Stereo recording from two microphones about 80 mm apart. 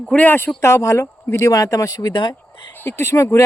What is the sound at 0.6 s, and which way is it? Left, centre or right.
Speech, left.